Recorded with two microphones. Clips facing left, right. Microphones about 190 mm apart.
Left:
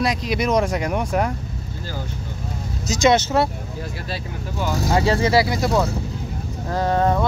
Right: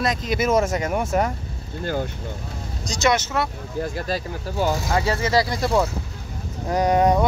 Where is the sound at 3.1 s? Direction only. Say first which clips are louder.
Left 4 dB; 30° left (ahead or behind).